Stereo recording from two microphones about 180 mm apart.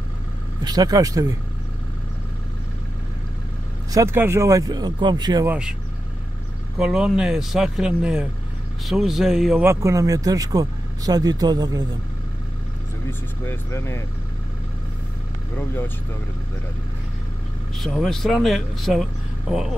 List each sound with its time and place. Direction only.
0.7 s speech: 20° right (ahead or behind)
3.9 s speech: 15° right (ahead or behind)
5.5 s speech: 5° right (ahead or behind)
6.8 s speech: 5° right (ahead or behind)
9.7 s speech: 15° right (ahead or behind)
13.5 s speech: 15° left (ahead or behind)
15.5 s speech: 15° left (ahead or behind)
17.7 s speech: centre (ahead or behind)